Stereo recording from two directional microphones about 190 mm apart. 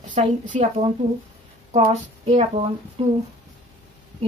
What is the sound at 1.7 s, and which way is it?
Speech, 35° right (ahead or behind).